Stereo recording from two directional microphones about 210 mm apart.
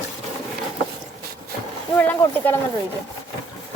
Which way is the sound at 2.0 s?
10° left (ahead or behind).